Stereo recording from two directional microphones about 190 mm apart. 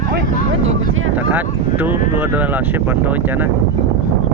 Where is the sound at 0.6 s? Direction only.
90° right.